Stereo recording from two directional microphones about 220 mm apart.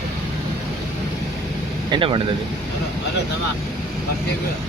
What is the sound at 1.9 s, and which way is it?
Speech, 25° right (ahead or behind).